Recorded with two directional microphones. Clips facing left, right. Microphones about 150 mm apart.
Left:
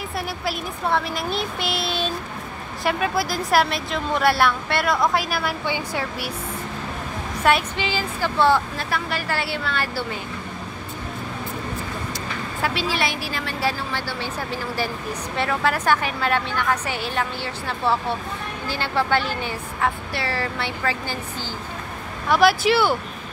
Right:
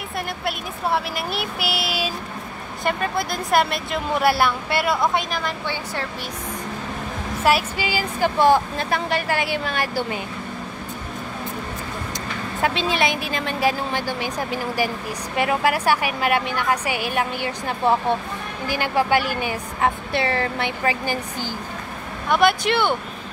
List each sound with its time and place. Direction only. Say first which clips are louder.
0.5 s speech: even; 5° right (ahead or behind)
7.4 s a woman's voice: even; 5° right (ahead or behind)
12.6 s a woman's voice: right 3 dB; 20° right (ahead or behind)
22.3 s speech: left 1 dB; centre (ahead or behind)